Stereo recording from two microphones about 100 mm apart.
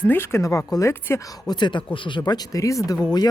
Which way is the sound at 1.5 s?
50° left (ahead or behind).